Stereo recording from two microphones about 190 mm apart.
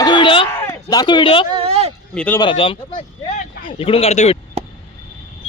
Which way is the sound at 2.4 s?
25° left (ahead or behind).